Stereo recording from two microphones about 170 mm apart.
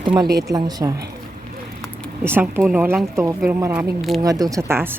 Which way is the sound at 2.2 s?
15° right (ahead or behind).